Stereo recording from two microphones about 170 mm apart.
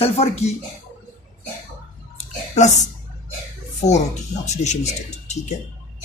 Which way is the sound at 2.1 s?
45° left (ahead or behind).